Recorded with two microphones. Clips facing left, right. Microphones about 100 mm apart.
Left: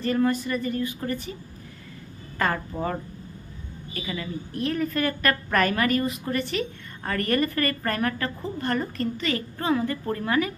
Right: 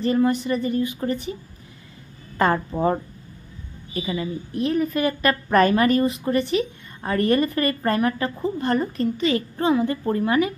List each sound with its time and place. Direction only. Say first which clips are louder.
0.0 s a woman's voice: right 3 dB; 20° right (ahead or behind)
2.3 s a woman's voice: right 6 dB; 25° right (ahead or behind)